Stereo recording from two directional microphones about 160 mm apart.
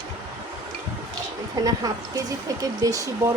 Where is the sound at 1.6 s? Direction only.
20° right (ahead or behind).